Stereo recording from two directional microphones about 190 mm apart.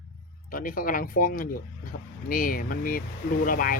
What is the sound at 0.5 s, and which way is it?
Speech, 45° left (ahead or behind).